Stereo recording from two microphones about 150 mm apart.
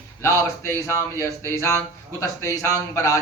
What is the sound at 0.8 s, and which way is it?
A man's voice, 20° left (ahead or behind).